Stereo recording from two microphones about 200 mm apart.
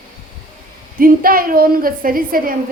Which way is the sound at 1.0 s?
45° right (ahead or behind).